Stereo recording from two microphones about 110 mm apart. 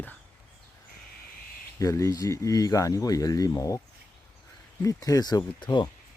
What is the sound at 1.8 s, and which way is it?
Speech, 30° left (ahead or behind).